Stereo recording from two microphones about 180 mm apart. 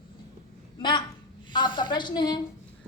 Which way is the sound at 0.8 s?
25° left (ahead or behind).